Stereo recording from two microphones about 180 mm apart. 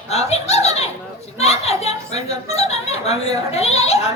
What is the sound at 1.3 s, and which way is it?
Speech, 35° left (ahead or behind).